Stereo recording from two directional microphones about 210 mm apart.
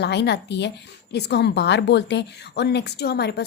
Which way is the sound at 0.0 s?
55° left (ahead or behind).